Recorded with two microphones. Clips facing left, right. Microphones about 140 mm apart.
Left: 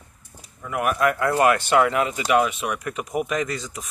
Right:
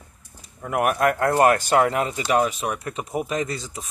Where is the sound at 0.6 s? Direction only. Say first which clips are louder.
Right 1 dB; 50° right (ahead or behind).